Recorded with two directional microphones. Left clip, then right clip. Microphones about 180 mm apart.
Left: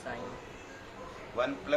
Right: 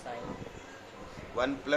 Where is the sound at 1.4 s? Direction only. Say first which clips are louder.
Right 1 dB; 45° right (ahead or behind).